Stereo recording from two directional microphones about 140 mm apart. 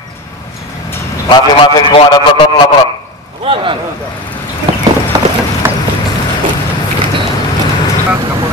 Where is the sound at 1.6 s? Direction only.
40° left (ahead or behind).